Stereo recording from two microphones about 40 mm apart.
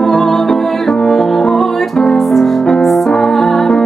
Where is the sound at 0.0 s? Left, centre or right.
Centre.